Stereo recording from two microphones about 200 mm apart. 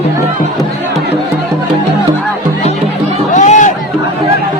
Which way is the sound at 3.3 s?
40° left (ahead or behind).